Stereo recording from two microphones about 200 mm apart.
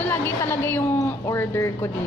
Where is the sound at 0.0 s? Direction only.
10° left (ahead or behind).